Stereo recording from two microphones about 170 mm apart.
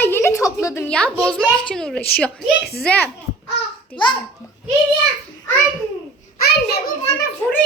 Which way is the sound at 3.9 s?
30° left (ahead or behind).